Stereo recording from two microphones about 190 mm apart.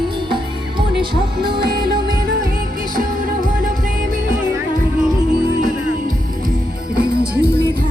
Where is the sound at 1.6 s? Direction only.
50° right (ahead or behind).